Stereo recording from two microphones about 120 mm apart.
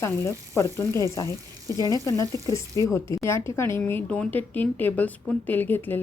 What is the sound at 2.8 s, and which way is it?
Speech, 25° left (ahead or behind).